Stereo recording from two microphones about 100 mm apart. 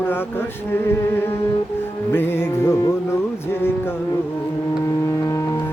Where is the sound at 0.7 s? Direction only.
25° left (ahead or behind).